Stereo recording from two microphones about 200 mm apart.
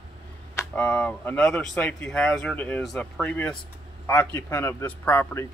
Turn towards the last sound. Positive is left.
turn(degrees=10)  # may be behind; listen again after turning